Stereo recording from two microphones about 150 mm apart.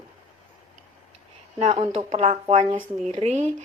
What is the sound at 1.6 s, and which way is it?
Speech, 50° right (ahead or behind).